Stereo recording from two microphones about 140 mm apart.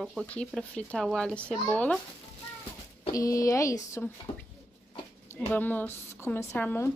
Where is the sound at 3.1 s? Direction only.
25° left (ahead or behind).